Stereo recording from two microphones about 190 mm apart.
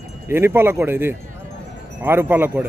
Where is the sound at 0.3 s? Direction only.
10° right (ahead or behind).